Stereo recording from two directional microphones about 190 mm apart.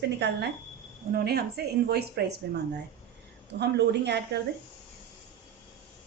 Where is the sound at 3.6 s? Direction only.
60° right (ahead or behind).